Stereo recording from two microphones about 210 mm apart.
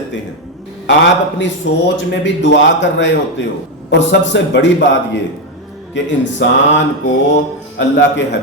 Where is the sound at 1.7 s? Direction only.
60° left (ahead or behind).